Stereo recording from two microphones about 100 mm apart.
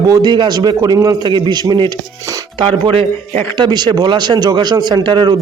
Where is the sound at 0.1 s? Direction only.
45° right (ahead or behind).